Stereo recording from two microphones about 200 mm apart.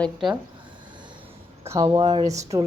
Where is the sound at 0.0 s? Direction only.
Centre (ahead or behind).